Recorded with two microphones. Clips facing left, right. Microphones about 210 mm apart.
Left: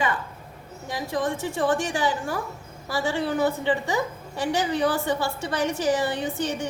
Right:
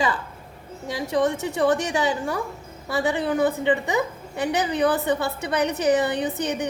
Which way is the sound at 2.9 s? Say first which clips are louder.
Right 2 dB; 20° right (ahead or behind).